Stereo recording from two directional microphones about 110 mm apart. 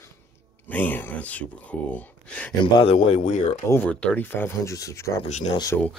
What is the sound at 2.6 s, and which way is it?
Speech, 60° left (ahead or behind).